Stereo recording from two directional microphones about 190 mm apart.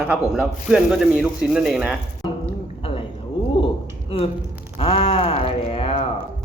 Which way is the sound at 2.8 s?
30° left (ahead or behind).